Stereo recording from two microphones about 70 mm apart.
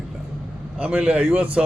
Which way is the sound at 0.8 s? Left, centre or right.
Centre.